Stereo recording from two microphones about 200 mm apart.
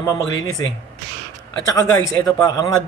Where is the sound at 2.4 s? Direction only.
20° left (ahead or behind).